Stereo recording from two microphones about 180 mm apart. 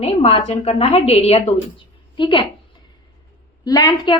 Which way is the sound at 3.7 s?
20° left (ahead or behind).